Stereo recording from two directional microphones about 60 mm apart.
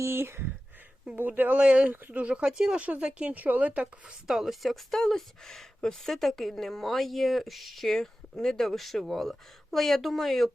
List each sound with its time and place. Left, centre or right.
0.0 s speech: right
1.4 s speech: right
2.7 s speech: right
4.3 s speech: centre